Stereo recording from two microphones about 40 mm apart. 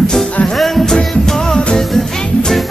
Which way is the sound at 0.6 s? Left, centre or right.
Centre.